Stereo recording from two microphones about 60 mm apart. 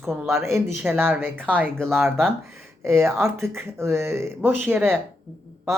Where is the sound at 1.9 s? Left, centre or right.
Right.